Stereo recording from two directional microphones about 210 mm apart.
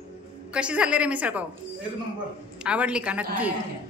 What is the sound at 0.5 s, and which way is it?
Speech, 5° right (ahead or behind).